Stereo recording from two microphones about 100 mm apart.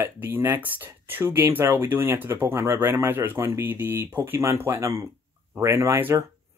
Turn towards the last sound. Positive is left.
turn(degrees=-25)  # may be behind; listen again after turning